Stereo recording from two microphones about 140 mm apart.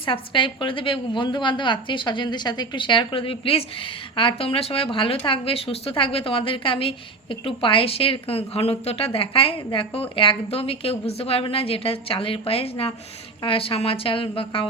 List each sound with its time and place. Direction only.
0.0 s a woman's voice: 35° left (ahead or behind)